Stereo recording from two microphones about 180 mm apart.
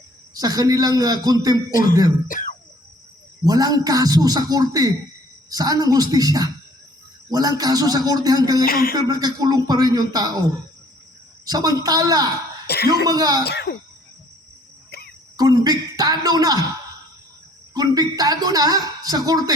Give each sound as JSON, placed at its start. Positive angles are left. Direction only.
{"t": 0.3, "sound": "a woman's voice", "side_deg": -20}
{"t": 1.7, "sound": "speech", "side_deg": 50}
{"t": 3.4, "sound": "a woman's voice", "side_deg": -20}
{"t": 8.6, "sound": "speech", "side_deg": 55}
{"t": 9.0, "sound": "a woman's voice", "side_deg": -20}
{"t": 11.4, "sound": "a woman's voice", "side_deg": -20}
{"t": 12.6, "sound": "speech", "side_deg": 65}
{"t": 13.1, "sound": "a woman's voice", "side_deg": -20}
{"t": 13.4, "sound": "speech", "side_deg": 65}
{"t": 14.8, "sound": "a sound", "side_deg": 60}
{"t": 15.4, "sound": "a woman's voice", "side_deg": -20}
{"t": 17.7, "sound": "a woman's voice", "side_deg": -20}